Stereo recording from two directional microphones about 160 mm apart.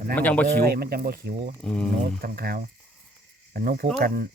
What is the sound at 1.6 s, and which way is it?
Speech, 5° left (ahead or behind).